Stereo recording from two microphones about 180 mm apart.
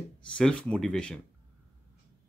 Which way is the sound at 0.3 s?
5° left (ahead or behind).